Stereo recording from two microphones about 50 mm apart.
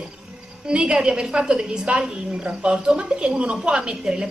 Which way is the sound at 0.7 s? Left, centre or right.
Centre.